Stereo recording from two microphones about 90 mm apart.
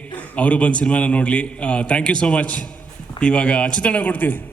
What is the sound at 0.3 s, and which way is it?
A man's voice, 15° left (ahead or behind).